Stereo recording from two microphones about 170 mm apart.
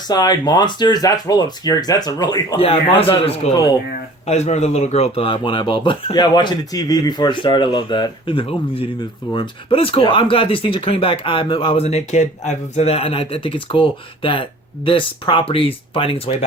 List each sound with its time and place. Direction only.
0.1 s speech: 25° left (ahead or behind)
2.6 s speech: 35° left (ahead or behind)
3.5 s speech: 25° left (ahead or behind)
4.3 s speech: 40° left (ahead or behind)